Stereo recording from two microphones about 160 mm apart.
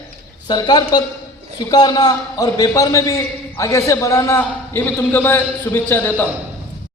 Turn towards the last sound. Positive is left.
turn(degrees=15)  # may be behind; listen again after turning